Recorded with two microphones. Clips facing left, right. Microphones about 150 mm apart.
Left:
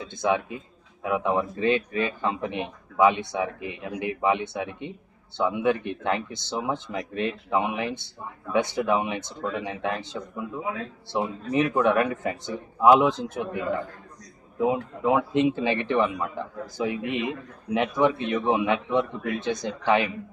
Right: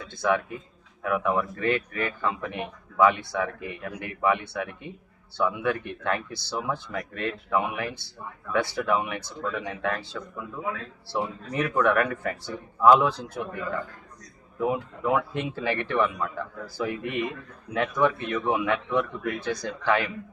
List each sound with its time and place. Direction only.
0.0 s a man's voice: 20° left (ahead or behind)